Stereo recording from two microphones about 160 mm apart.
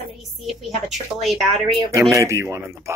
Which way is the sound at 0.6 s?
Centre (ahead or behind).